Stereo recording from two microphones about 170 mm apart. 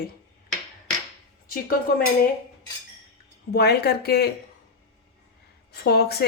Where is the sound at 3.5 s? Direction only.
70° left (ahead or behind).